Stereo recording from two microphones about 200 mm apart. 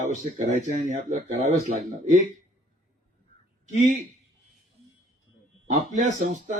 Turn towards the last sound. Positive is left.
turn(degrees=-35)  # may be behind; listen again after turning